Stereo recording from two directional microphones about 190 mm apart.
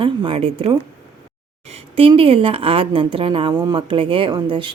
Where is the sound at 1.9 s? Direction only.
30° right (ahead or behind).